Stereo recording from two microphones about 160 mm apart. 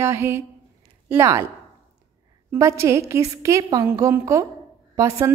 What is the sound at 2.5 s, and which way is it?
A woman's voice, 15° right (ahead or behind).